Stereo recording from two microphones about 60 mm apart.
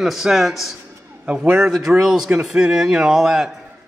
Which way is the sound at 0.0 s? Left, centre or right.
Centre.